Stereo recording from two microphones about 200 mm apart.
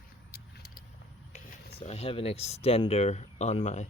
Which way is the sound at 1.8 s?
30° left (ahead or behind).